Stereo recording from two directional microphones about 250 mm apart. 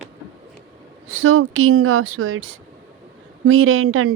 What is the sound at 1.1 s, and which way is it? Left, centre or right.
Speech, right.